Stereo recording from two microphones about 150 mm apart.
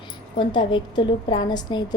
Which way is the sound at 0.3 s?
30° left (ahead or behind).